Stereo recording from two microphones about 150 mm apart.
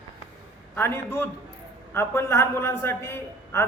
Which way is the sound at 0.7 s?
15° left (ahead or behind).